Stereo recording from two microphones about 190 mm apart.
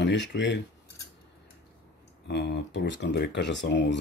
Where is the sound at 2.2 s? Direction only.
65° left (ahead or behind).